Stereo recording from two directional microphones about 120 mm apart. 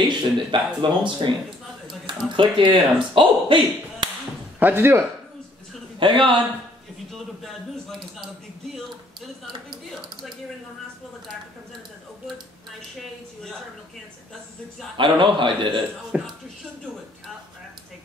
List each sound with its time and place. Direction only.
0.0 s speech: 40° right (ahead or behind)
2.3 s speech: 45° right (ahead or behind)
4.6 s speech: 15° right (ahead or behind)
5.9 s speech: 45° right (ahead or behind)
7.1 s speech: centre (ahead or behind)
15.0 s speech: 45° right (ahead or behind)
16.1 s speech: 10° right (ahead or behind)